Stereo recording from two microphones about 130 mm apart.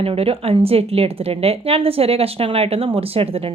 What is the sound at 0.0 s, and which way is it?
Speech, 50° right (ahead or behind).